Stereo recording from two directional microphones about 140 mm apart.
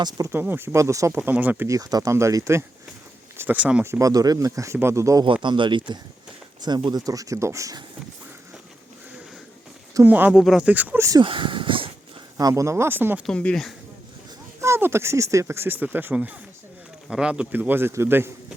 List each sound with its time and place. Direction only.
0.0 s speech: 20° right (ahead or behind)
3.8 s speech: 20° right (ahead or behind)
5.2 s speech: 35° right (ahead or behind)
9.9 s speech: 15° right (ahead or behind)
11.2 s speech: 35° right (ahead or behind)
12.4 s speech: 25° right (ahead or behind)
13.2 s speech: 5° left (ahead or behind)
14.6 s speech: 20° right (ahead or behind)